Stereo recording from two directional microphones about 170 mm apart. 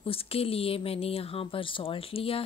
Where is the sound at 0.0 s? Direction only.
35° left (ahead or behind).